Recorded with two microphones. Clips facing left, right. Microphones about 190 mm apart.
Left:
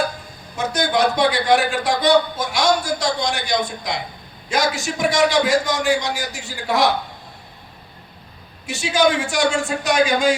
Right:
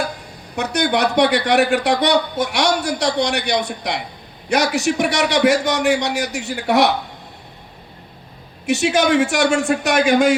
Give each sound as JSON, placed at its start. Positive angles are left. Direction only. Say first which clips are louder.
{"t": 0.5, "sound": "a man's voice", "louder": "right 1 dB", "side_deg": -70}
{"t": 8.6, "sound": "a man's voice", "louder": "right 2 dB", "side_deg": -70}